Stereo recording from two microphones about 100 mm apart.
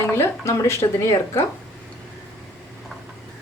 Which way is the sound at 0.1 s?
25° left (ahead or behind).